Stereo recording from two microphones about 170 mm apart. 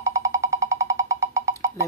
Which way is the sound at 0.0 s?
20° right (ahead or behind).